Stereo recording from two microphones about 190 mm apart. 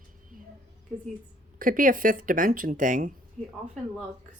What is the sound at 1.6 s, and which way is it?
Speech, 45° right (ahead or behind).